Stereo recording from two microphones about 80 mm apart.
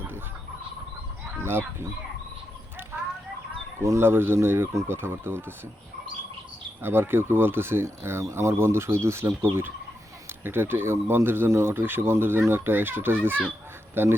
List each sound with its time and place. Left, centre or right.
1.5 s speech: right
3.8 s speech: right
6.8 s speech: right